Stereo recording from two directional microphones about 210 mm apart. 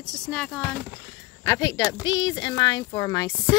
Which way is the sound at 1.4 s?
15° left (ahead or behind).